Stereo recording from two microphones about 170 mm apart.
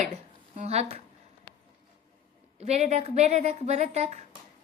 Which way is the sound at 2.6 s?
40° right (ahead or behind).